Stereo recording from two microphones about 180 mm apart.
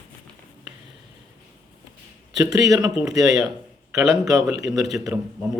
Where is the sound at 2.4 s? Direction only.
20° right (ahead or behind).